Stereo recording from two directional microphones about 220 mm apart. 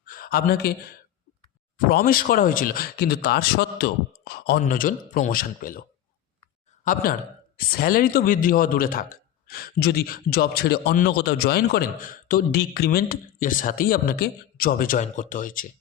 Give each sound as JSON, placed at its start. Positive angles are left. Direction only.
{"t": 0.0, "sound": "a sound", "side_deg": 40}
{"t": 1.9, "sound": "speech", "side_deg": 40}
{"t": 6.8, "sound": "speech", "side_deg": 40}